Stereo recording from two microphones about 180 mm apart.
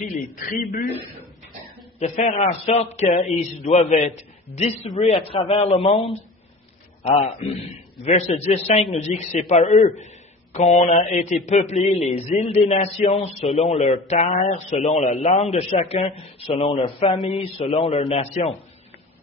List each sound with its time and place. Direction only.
0.1 s a man's voice: 50° left (ahead or behind)
2.0 s a man's voice: 40° left (ahead or behind)